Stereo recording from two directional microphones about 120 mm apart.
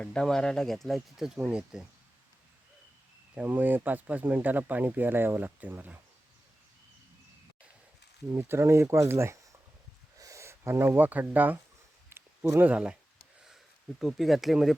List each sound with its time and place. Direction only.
0.0 s speech: 5° left (ahead or behind); by 1.8 s 10° right (ahead or behind)
3.3 s speech: 15° right (ahead or behind)
8.3 s speech: 25° right (ahead or behind)
12.0 s a sound: 20° right (ahead or behind)
14.0 s speech: centre (ahead or behind)